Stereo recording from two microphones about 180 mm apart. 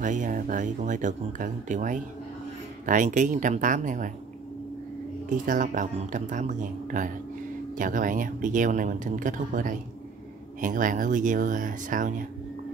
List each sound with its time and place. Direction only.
0.0 s speech: 45° right (ahead or behind)
5.3 s speech: 45° right (ahead or behind)